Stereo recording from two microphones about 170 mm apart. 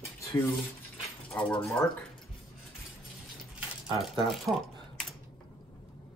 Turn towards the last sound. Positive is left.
turn(degrees=0)  # may be behind; listen again after turning